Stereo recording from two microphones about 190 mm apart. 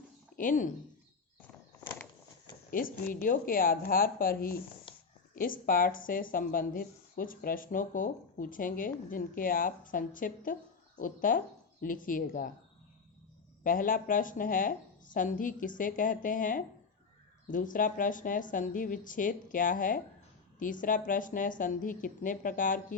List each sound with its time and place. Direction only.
0.3 s speech: 45° left (ahead or behind)
2.6 s speech: 45° left (ahead or behind)
13.7 s speech: 45° left (ahead or behind)